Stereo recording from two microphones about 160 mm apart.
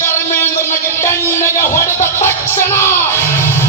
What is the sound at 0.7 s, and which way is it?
Music, 15° left (ahead or behind).